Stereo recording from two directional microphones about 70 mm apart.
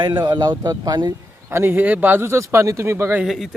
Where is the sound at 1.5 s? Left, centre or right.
Right.